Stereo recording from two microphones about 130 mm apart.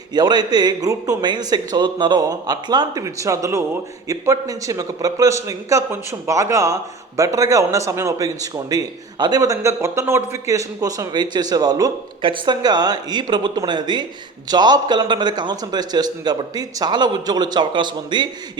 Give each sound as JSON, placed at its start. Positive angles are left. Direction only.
{"t": 0.1, "sound": "a man's voice", "side_deg": -30}